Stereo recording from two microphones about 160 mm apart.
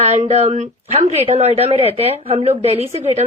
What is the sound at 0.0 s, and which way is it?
Speech, 40° right (ahead or behind).